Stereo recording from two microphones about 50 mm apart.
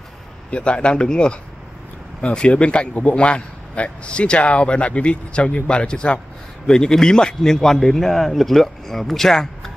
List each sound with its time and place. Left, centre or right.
0.5 s a man's voice: centre